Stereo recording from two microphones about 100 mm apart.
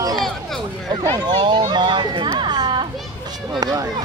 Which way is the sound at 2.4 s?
50° right (ahead or behind).